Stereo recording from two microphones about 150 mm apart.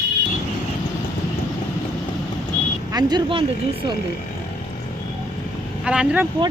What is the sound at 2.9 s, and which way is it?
Speech, 25° right (ahead or behind).